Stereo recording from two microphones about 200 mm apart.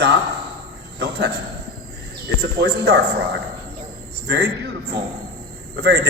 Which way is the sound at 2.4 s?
55° right (ahead or behind).